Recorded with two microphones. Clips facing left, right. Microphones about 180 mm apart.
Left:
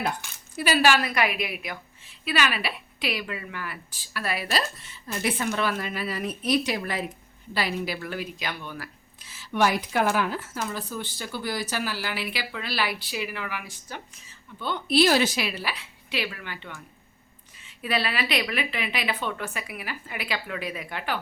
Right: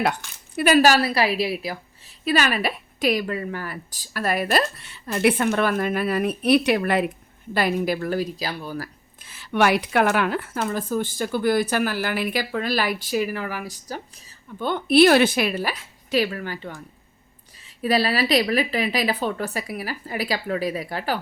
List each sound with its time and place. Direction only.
0.5 s a woman's voice: 50° right (ahead or behind)
7.5 s a woman's voice: 50° right (ahead or behind)
9.2 s a woman's voice: 60° right (ahead or behind); by 14.0 s 40° right (ahead or behind)
14.6 s a woman's voice: 55° right (ahead or behind)
17.8 s a woman's voice: 40° right (ahead or behind)